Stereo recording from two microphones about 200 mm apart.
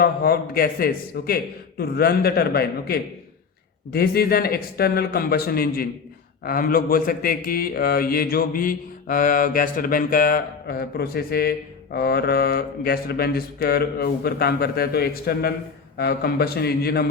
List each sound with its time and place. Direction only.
0.0 s a man's voice: 50° left (ahead or behind)